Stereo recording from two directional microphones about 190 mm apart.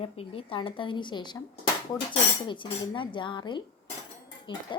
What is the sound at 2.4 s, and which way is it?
A woman's voice, 25° left (ahead or behind).